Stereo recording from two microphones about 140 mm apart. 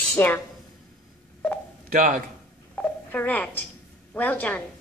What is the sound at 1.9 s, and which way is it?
Speech, 75° right (ahead or behind).